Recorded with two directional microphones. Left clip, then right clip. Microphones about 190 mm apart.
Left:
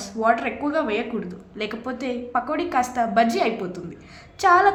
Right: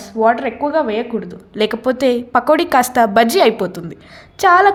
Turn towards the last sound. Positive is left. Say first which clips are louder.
# right 6 dB
turn(degrees=-45)  # may be behind; listen again after turning